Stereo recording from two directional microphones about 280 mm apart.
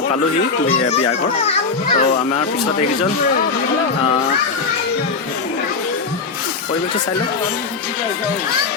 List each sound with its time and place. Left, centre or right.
1.4 s a child's voice: left